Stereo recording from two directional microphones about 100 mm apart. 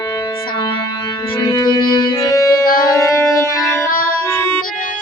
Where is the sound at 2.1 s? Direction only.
30° left (ahead or behind).